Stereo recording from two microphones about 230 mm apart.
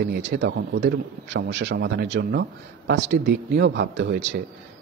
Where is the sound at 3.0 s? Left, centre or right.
Right.